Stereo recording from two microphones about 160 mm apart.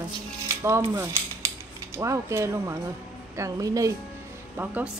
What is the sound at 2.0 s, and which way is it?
A woman's voice, 20° right (ahead or behind).